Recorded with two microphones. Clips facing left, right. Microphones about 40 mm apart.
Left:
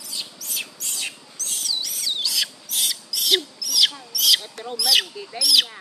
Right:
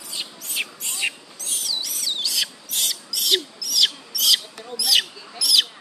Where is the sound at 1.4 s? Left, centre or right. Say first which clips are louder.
Even; centre.